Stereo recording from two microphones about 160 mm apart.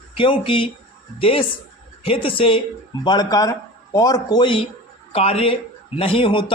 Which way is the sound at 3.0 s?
25° left (ahead or behind).